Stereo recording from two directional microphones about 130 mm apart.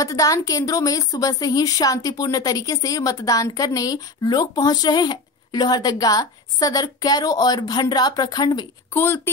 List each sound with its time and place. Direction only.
0.0 s a woman's voice: 25° left (ahead or behind)
8.9 s speech: 20° left (ahead or behind)